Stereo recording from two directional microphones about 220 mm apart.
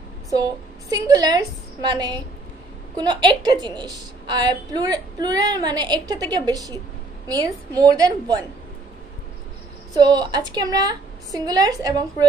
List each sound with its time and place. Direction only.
0.3 s a woman's voice: 15° right (ahead or behind)
9.9 s a woman's voice: 20° right (ahead or behind)